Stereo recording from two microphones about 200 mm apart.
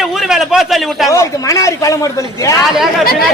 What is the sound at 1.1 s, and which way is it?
Speech, 15° left (ahead or behind).